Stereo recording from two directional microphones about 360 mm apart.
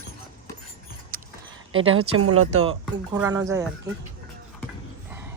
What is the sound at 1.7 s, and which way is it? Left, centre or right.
Speech, right.